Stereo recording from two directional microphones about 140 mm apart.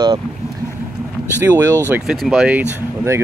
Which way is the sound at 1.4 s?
20° right (ahead or behind).